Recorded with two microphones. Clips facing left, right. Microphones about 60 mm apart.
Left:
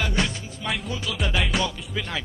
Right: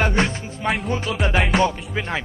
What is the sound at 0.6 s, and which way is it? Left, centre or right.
Music, right.